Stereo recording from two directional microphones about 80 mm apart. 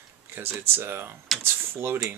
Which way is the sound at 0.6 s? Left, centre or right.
Right.